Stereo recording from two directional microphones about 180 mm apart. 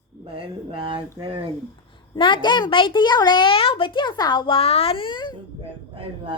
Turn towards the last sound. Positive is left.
turn(degrees=-30)  # may be behind; listen again after turning